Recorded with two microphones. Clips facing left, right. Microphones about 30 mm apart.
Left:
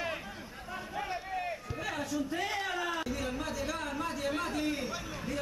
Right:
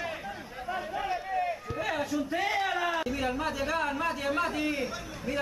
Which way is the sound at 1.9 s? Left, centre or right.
Centre.